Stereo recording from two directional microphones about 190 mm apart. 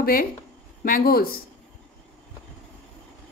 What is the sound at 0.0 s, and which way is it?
A woman's voice, 50° left (ahead or behind).